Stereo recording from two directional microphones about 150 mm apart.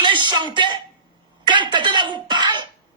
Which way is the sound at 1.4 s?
30° right (ahead or behind).